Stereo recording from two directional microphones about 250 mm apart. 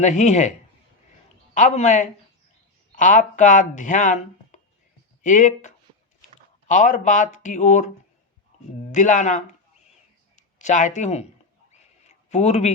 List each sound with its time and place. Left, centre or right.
0.0 s speech: left
1.5 s speech: left
8.9 s speech: left
11.7 s a sound: left